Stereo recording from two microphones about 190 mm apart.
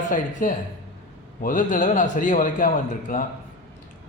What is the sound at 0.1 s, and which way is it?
Speech, 45° left (ahead or behind).